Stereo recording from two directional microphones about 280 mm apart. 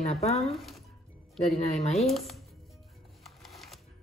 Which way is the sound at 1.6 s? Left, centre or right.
Left.